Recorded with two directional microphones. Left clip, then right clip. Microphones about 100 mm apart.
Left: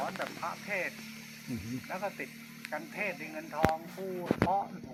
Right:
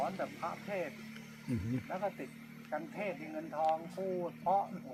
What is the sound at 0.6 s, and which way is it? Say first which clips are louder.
Speech: left 4 dB; 10° right (ahead or behind).